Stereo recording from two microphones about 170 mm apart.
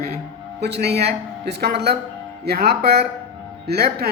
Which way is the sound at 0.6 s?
75° right (ahead or behind).